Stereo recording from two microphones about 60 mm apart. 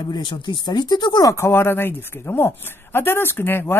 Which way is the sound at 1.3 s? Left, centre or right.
Left.